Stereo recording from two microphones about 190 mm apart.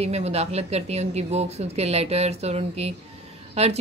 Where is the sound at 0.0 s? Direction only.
35° right (ahead or behind).